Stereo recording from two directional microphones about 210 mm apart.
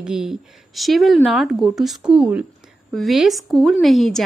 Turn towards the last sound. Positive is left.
turn(degrees=0)  # may be behind; listen again after turning